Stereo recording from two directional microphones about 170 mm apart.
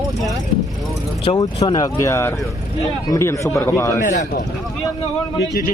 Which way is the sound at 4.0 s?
45° left (ahead or behind).